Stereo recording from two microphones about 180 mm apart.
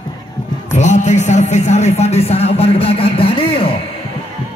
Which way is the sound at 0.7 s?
40° left (ahead or behind).